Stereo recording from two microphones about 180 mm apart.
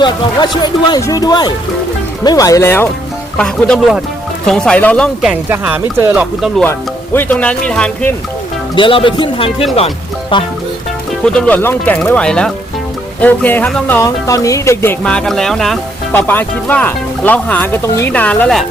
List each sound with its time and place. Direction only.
0.0 s speech: 25° left (ahead or behind); by 6.5 s 10° right (ahead or behind)
6.6 s speech: 10° left (ahead or behind)
8.7 s speech: 30° left (ahead or behind)
11.3 s speech: 5° left (ahead or behind)